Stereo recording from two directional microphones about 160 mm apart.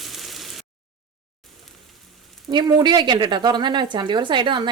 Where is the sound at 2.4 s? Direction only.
25° right (ahead or behind).